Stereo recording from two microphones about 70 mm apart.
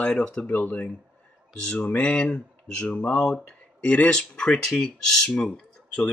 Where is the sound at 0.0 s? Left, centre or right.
Centre.